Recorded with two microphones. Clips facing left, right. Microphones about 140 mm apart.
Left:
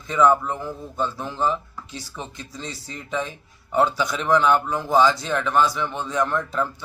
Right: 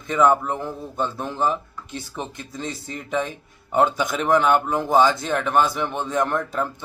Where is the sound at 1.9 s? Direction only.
55° right (ahead or behind).